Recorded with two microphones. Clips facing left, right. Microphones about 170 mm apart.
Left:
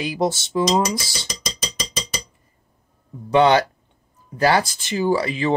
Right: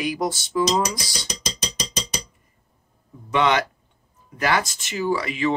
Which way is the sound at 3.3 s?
35° left (ahead or behind).